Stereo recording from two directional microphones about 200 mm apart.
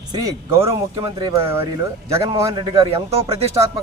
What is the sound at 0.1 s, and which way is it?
Speech, 15° right (ahead or behind).